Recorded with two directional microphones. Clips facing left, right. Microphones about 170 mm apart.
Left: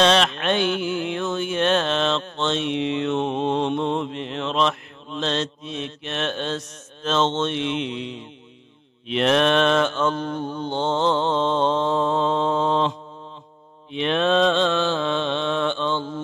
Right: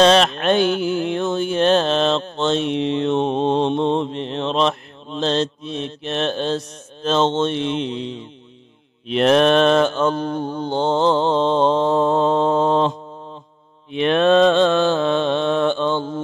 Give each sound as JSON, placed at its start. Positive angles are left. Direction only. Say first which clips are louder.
{"t": 0.0, "sound": "a sound", "louder": "right 5 dB", "side_deg": -40}
{"t": 9.0, "sound": "mantra", "louder": "right 4 dB", "side_deg": -40}
{"t": 13.9, "sound": "mantra", "louder": "right 5 dB", "side_deg": -55}